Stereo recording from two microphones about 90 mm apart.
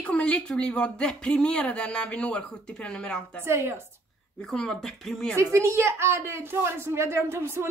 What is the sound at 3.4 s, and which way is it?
Speech, 30° right (ahead or behind).